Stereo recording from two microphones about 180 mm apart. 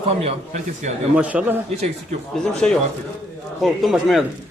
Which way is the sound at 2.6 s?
5° left (ahead or behind).